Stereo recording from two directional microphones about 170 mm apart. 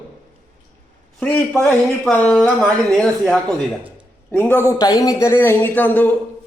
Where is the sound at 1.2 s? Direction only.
10° left (ahead or behind).